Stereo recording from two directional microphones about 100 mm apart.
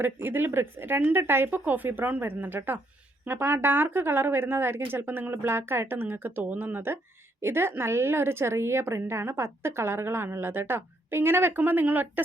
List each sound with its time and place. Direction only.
0.0 s a woman's voice: 20° right (ahead or behind)